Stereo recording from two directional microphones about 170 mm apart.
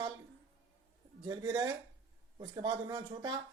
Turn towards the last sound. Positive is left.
turn(degrees=-25)  # may be behind; listen again after turning